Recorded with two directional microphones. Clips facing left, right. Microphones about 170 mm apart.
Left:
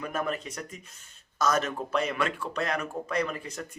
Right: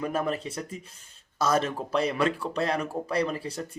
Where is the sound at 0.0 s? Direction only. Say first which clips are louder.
Right 3 dB; 30° right (ahead or behind).